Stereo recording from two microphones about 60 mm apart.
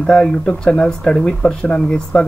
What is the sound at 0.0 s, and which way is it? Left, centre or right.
Speech, centre.